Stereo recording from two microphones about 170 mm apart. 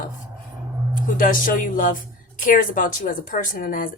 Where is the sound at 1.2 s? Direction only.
55° left (ahead or behind).